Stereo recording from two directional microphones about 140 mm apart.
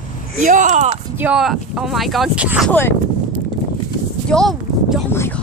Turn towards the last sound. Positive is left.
turn(degrees=5)  # may be behind; listen again after turning